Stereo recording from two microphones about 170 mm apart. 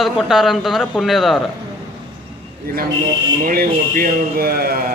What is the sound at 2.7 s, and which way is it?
Speech, 60° right (ahead or behind).